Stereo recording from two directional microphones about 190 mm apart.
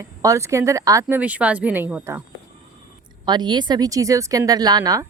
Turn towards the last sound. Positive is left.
turn(degrees=-20)  # may be behind; listen again after turning